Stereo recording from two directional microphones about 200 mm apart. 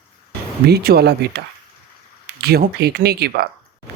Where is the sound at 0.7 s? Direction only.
50° right (ahead or behind).